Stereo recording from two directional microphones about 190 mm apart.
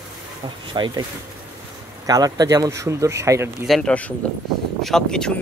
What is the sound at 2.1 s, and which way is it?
Speech, 20° right (ahead or behind).